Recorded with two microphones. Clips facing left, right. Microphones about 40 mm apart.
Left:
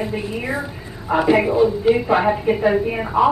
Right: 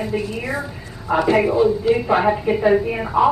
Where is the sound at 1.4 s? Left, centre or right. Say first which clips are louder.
Left 1 dB; centre.